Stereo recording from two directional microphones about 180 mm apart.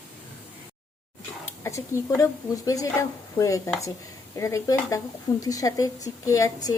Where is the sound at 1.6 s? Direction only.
15° left (ahead or behind).